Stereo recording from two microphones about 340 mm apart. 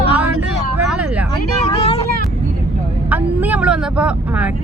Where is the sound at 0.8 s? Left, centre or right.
Centre.